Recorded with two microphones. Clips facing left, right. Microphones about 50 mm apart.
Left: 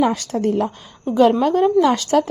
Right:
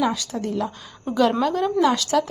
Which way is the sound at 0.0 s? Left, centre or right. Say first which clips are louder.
Left 5 dB; left.